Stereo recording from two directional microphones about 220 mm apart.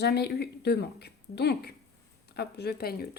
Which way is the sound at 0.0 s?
45° left (ahead or behind).